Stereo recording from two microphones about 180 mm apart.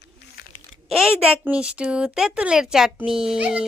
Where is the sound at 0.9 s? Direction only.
Centre (ahead or behind).